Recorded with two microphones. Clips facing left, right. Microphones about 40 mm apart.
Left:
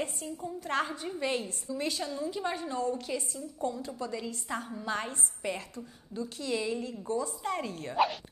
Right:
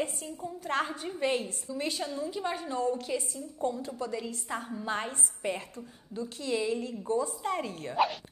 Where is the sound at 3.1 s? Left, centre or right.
Right.